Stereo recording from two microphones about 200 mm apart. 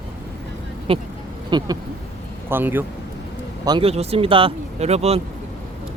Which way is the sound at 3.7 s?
25° right (ahead or behind).